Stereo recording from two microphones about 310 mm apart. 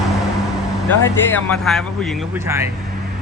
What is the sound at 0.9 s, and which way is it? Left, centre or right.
Speech, centre.